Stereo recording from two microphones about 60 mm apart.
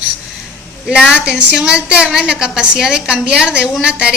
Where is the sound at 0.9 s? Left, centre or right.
Centre.